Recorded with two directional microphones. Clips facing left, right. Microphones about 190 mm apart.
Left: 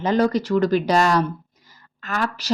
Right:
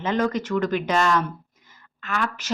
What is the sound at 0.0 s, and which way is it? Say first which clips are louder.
Speech: left 4 dB; 35° left (ahead or behind).